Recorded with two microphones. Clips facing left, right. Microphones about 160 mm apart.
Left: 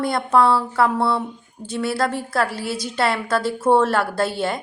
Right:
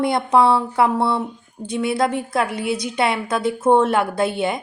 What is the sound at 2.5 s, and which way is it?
Speech, 5° left (ahead or behind).